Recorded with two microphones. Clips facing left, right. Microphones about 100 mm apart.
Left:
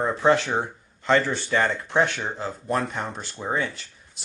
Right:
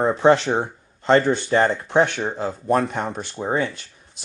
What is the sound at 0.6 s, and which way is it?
Speech, 40° right (ahead or behind).